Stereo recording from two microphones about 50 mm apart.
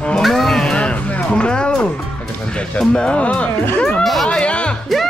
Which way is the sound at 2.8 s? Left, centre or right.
Centre.